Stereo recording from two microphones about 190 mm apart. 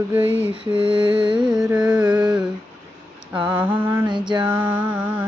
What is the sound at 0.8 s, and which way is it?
Carnatic music, 25° right (ahead or behind).